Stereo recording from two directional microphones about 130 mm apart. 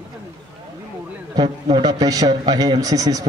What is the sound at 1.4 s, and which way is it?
A man's voice, 30° right (ahead or behind).